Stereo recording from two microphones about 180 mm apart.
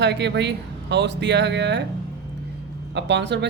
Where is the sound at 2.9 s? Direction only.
75° right (ahead or behind).